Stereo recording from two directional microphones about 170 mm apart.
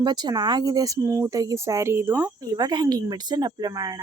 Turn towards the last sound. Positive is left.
turn(degrees=-20)  # may be behind; listen again after turning